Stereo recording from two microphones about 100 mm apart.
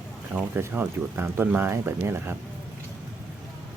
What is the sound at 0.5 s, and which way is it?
Speech, 20° right (ahead or behind).